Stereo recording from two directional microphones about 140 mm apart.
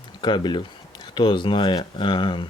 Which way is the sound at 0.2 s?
35° left (ahead or behind).